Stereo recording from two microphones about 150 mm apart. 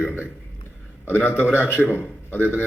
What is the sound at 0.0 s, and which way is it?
A man's voice, 10° left (ahead or behind).